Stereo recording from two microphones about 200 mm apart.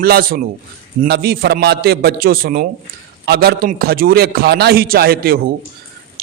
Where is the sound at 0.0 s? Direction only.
50° right (ahead or behind).